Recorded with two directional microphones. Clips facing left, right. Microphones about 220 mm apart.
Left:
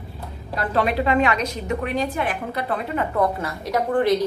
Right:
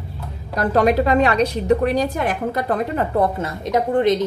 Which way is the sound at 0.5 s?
45° right (ahead or behind).